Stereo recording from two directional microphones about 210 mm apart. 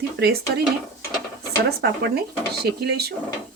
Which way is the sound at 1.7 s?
50° right (ahead or behind).